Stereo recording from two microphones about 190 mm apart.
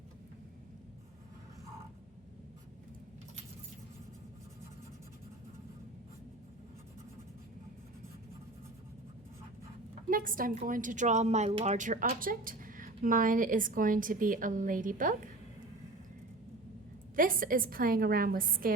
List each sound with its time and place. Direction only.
10.1 s a woman's voice: 45° right (ahead or behind)
17.2 s a woman's voice: 45° right (ahead or behind)